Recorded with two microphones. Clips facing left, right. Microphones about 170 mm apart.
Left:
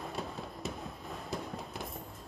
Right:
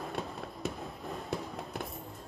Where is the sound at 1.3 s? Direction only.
Centre (ahead or behind).